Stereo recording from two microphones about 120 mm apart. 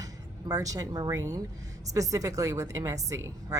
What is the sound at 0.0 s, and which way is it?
Speech, 30° right (ahead or behind).